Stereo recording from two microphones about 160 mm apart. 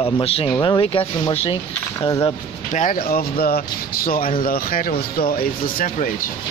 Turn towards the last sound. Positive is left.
turn(degrees=60)  # may be behind; listen again after turning